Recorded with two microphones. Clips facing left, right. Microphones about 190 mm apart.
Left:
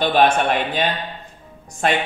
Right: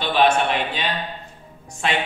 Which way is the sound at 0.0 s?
50° left (ahead or behind).